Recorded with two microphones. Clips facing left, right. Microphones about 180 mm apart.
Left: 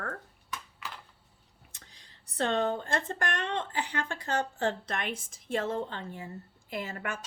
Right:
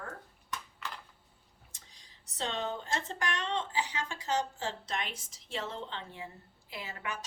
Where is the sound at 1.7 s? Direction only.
60° left (ahead or behind).